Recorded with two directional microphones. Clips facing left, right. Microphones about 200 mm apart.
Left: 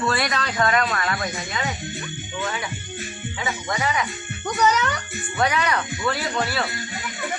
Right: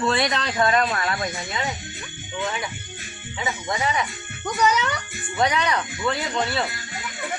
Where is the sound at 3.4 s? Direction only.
20° right (ahead or behind).